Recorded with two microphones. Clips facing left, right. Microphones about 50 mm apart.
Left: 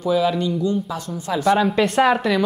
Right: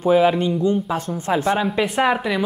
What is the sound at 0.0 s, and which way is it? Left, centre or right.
Speech, right.